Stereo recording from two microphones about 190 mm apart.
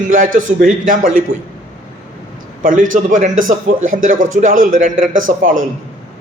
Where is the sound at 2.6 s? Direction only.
45° right (ahead or behind).